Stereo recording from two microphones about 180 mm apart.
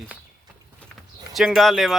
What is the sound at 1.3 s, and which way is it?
Speech, centre (ahead or behind).